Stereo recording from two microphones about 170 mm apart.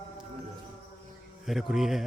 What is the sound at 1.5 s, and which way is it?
Speech, centre (ahead or behind).